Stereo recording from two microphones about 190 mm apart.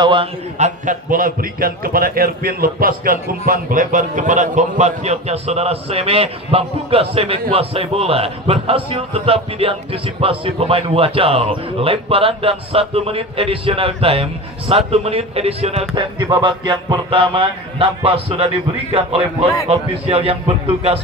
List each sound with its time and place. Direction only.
0.0 s a man's voice: 25° right (ahead or behind)
0.6 s a man's voice: 40° right (ahead or behind)